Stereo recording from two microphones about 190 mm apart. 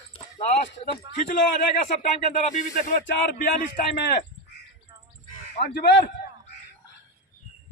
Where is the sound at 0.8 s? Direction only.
40° left (ahead or behind).